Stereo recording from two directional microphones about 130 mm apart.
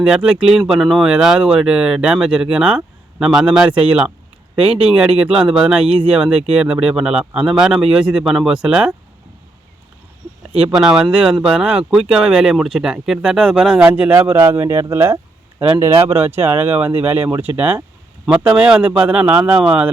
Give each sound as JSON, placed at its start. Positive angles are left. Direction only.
{"t": 0.0, "sound": "speech", "side_deg": -5}
{"t": 10.8, "sound": "speech", "side_deg": -5}
{"t": 15.9, "sound": "speech", "side_deg": -45}
{"t": 16.1, "sound": "speech", "side_deg": -15}